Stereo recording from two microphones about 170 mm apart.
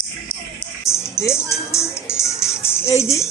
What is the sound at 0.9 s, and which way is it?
Music, 15° left (ahead or behind).